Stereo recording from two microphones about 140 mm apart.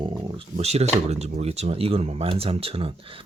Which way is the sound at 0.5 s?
50° right (ahead or behind).